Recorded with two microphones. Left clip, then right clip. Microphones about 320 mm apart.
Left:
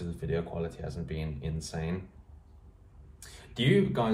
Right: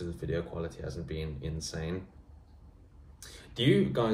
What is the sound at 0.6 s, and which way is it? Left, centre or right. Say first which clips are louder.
Speech: left 1 dB; centre.